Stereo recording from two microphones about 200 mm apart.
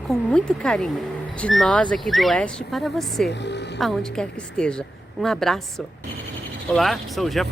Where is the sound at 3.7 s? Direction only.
Centre (ahead or behind).